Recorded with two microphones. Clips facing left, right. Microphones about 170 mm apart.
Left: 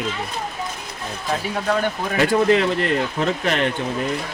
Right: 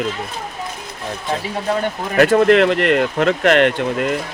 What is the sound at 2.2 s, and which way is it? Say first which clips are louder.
Speech: right 5 dB; 65° right (ahead or behind).